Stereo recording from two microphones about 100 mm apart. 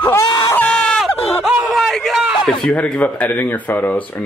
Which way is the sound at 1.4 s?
5° right (ahead or behind).